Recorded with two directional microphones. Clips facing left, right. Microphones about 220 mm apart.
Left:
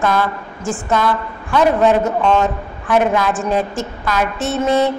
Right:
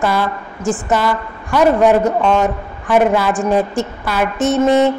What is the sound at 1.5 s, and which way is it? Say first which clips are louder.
A man's voice: right 2 dB; 10° right (ahead or behind).